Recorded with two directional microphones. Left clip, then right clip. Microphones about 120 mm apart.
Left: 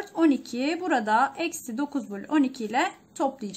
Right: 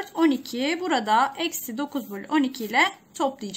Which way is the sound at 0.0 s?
50° left (ahead or behind).